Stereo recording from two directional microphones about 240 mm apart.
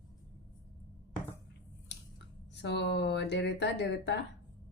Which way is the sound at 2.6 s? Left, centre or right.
Left.